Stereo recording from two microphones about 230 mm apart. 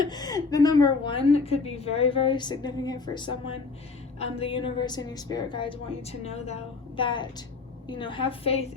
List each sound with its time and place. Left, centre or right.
0.0 s a woman's voice: centre